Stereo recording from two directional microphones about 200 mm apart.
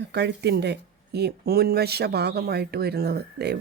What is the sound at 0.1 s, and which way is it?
Speech, 55° right (ahead or behind).